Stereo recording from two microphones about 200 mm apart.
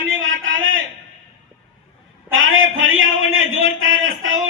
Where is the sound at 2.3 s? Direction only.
80° right.